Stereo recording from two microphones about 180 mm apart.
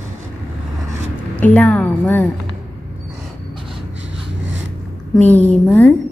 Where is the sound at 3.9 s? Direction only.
90° right.